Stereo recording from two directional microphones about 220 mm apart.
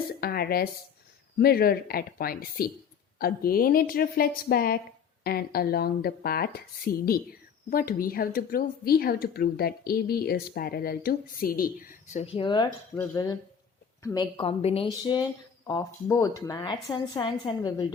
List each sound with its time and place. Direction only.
0.2 s speech: 45° left (ahead or behind)
12.2 s a woman's voice: 25° left (ahead or behind)